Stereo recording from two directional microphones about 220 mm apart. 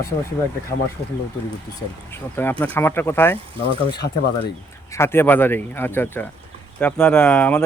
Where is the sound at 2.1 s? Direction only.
10° left (ahead or behind).